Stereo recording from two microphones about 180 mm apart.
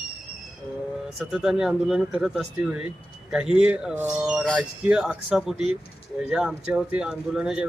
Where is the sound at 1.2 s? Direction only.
Centre (ahead or behind).